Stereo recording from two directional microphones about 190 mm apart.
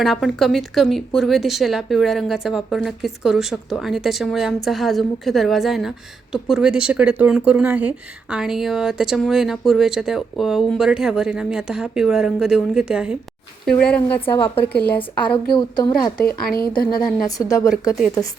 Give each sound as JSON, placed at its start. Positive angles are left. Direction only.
{"t": 0.0, "sound": "speech", "side_deg": 0}
{"t": 15.5, "sound": "speech", "side_deg": 25}
{"t": 16.2, "sound": "a woman's voice", "side_deg": 50}
{"t": 17.2, "sound": "speech", "side_deg": 20}